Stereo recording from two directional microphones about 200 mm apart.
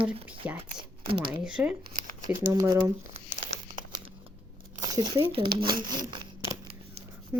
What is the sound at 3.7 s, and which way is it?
Crumpling, 25° right (ahead or behind).